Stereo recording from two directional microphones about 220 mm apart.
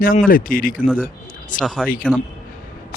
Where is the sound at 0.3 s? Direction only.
40° left (ahead or behind).